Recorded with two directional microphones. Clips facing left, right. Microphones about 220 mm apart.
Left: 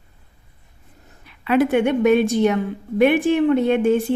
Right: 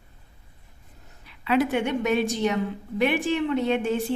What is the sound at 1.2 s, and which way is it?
A woman's voice, 55° left (ahead or behind).